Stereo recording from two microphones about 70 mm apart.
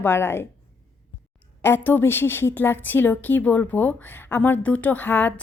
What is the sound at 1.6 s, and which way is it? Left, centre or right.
A woman's voice, left.